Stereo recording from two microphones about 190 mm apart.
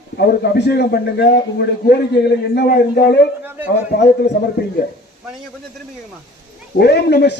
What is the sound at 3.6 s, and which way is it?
Speech, 60° left (ahead or behind).